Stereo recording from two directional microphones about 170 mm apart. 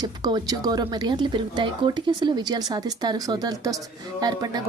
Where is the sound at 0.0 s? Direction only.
25° right (ahead or behind).